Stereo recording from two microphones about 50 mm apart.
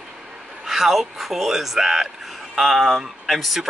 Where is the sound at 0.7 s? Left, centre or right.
Centre.